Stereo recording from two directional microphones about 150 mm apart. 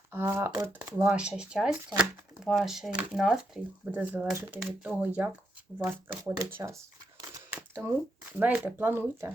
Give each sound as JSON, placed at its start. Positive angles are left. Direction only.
{"t": 0.1, "sound": "speech", "side_deg": -15}
{"t": 1.1, "sound": "speech", "side_deg": -5}